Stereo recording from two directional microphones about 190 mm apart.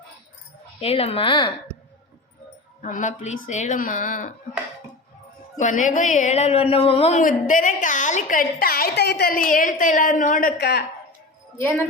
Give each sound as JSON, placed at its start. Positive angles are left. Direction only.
{"t": 0.8, "sound": "a woman's voice", "side_deg": 30}
{"t": 2.8, "sound": "a woman's voice", "side_deg": 40}
{"t": 5.5, "sound": "a woman's voice", "side_deg": 40}
{"t": 7.2, "sound": "a woman's voice", "side_deg": 45}
{"t": 11.5, "sound": "speech", "side_deg": 10}